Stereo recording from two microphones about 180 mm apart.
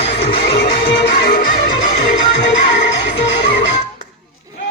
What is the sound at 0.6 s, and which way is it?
Music, 70° left (ahead or behind).